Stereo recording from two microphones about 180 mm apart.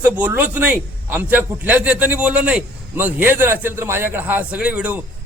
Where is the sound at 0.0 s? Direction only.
10° right (ahead or behind).